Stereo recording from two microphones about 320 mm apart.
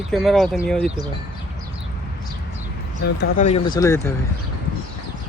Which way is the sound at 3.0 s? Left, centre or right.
Left.